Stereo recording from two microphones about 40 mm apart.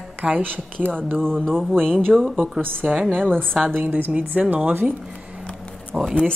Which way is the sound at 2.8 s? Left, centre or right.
Right.